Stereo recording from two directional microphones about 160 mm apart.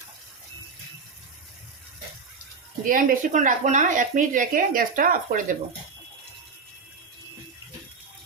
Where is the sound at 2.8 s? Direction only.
55° right (ahead or behind).